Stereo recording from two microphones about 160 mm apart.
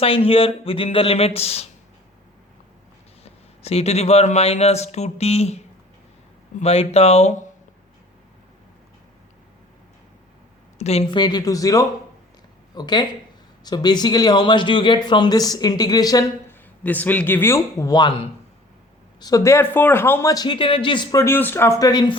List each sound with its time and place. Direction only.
0.0 s speech: 35° left (ahead or behind)
3.2 s speech: 40° left (ahead or behind)
6.6 s speech: 40° left (ahead or behind)
10.8 s speech: 40° left (ahead or behind); by 16.6 s 25° left (ahead or behind)
16.8 s speech: 10° left (ahead or behind); by 22.2 s 25° left (ahead or behind)